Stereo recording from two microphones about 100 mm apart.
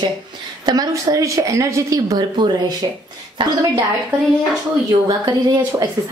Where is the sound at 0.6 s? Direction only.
35° right (ahead or behind).